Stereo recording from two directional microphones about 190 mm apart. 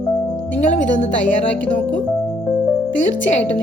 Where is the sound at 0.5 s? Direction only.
40° left (ahead or behind).